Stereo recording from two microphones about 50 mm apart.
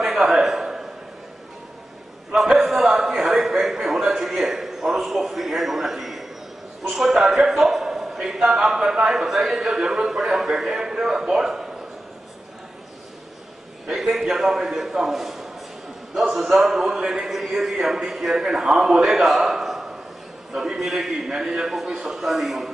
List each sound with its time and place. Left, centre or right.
0.0 s a sound: centre
2.3 s a sound: centre
6.9 s a man's voice: centre
14.1 s a man's voice: centre
17.0 s a man's voice: centre
17.6 s a man's voice: centre